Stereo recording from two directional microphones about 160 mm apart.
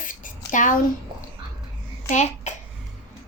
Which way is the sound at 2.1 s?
45° left (ahead or behind).